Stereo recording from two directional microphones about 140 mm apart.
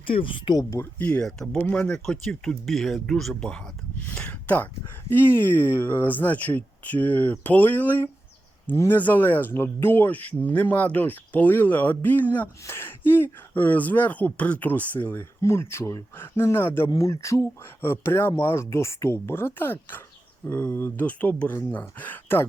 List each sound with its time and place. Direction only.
0.1 s speech: 40° left (ahead or behind)
0.7 s speech: 15° left (ahead or behind)